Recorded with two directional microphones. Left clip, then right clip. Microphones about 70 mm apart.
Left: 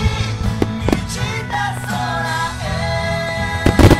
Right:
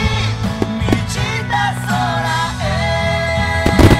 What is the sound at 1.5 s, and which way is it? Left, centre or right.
Music, right.